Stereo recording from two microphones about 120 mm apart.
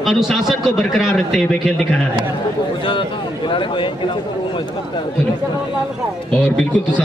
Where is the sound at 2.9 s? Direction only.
45° left (ahead or behind).